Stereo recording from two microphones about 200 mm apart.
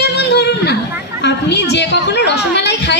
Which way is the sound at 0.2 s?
55° left (ahead or behind).